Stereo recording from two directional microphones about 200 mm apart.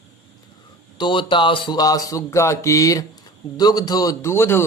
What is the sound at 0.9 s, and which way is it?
A man's voice, 25° left (ahead or behind).